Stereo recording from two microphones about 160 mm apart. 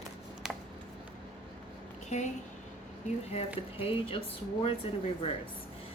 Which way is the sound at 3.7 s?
35° left (ahead or behind).